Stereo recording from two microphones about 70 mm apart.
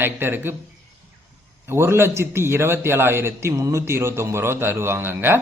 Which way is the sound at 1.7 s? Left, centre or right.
Right.